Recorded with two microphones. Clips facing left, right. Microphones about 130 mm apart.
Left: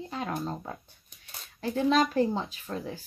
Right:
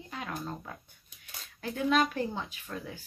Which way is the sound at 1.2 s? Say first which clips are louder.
Left 5 dB; 30° left (ahead or behind).